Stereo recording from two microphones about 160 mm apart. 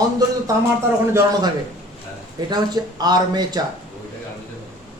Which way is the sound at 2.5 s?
25° right (ahead or behind).